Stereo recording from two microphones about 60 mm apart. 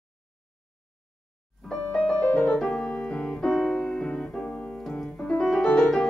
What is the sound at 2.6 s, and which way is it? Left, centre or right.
Piano, centre.